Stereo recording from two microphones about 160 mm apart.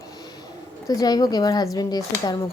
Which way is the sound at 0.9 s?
25° left (ahead or behind).